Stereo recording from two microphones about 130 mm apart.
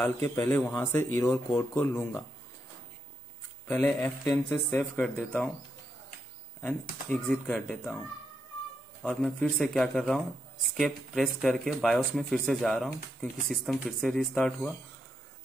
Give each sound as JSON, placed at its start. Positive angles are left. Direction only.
{"t": 0.0, "sound": "speech", "side_deg": 20}
{"t": 3.6, "sound": "speech", "side_deg": 15}
{"t": 6.6, "sound": "speech", "side_deg": 10}
{"t": 9.0, "sound": "speech", "side_deg": 5}